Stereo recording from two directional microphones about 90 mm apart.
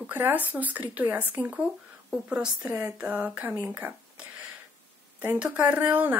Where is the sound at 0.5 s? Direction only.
20° right (ahead or behind).